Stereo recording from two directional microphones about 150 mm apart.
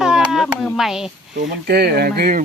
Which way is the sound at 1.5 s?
90° right.